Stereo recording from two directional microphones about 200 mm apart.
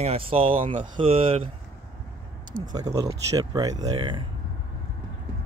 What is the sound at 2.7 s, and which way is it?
Speech, 20° right (ahead or behind).